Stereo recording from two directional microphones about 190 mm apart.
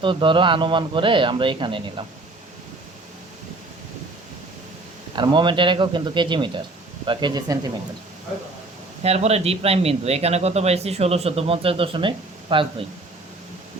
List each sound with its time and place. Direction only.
0.0 s speech: 25° right (ahead or behind)
5.1 s speech: 25° right (ahead or behind)
9.0 s a man's voice: 35° right (ahead or behind)